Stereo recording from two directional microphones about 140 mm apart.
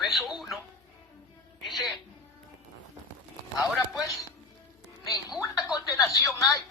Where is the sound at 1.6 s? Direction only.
Centre (ahead or behind).